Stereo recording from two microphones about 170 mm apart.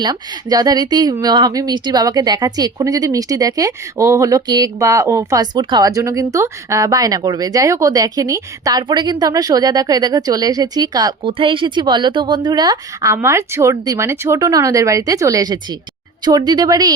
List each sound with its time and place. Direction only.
0.0 s speech: 25° right (ahead or behind)